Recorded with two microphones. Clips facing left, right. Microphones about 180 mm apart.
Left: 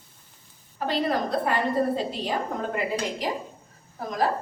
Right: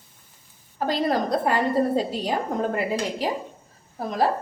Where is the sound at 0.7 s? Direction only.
40° right (ahead or behind).